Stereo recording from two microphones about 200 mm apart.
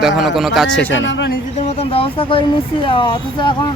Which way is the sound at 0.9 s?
65° left (ahead or behind).